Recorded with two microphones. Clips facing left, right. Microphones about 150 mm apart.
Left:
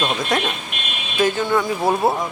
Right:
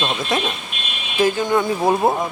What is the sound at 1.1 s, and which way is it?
Speech, 15° right (ahead or behind).